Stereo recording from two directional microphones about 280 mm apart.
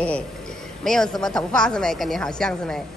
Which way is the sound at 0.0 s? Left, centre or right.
Centre.